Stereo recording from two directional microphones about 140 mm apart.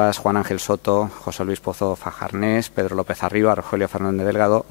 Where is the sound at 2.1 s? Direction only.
10° left (ahead or behind).